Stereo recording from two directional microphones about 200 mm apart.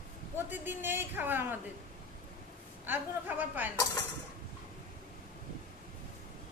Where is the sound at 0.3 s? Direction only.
10° right (ahead or behind).